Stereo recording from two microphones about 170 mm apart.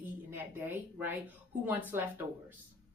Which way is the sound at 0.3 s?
10° right (ahead or behind).